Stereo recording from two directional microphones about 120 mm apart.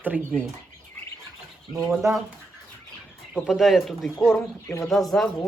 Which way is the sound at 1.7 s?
Centre (ahead or behind).